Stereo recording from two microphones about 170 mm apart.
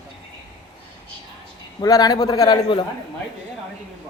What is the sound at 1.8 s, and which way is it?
Speech, 20° left (ahead or behind).